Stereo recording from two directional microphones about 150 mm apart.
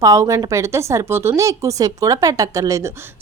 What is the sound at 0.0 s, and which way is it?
Speech, 20° right (ahead or behind).